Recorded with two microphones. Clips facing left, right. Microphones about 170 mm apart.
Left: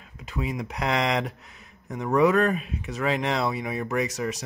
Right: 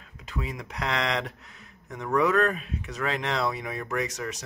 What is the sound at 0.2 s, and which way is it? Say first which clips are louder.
Speech: left 5 dB; 10° left (ahead or behind).